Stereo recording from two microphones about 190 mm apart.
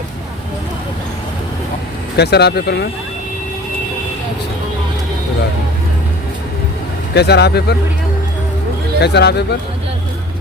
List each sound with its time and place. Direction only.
2.1 s speech: 60° left (ahead or behind)
7.1 s speech: 60° left (ahead or behind)
9.0 s speech: 60° left (ahead or behind)